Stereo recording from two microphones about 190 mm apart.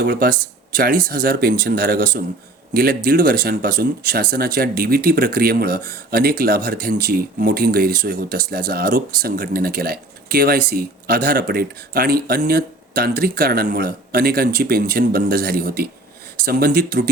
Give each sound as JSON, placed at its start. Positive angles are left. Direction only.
{"t": 0.0, "sound": "speech", "side_deg": -50}